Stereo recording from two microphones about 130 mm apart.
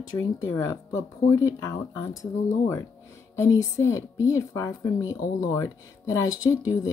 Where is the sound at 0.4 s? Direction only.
20° left (ahead or behind).